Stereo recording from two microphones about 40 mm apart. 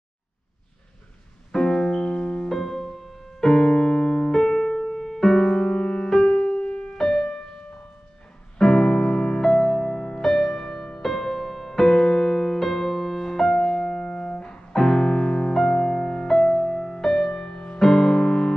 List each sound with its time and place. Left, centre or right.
1.5 s music: centre
6.2 s music: left
7.2 s music: left; by 10.6 s centre
10.6 s music: left
11.0 s music: centre
13.6 s music: left
17.7 s music: centre